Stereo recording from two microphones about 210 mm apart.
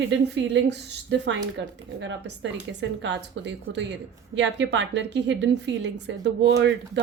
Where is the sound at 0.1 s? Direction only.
60° right (ahead or behind).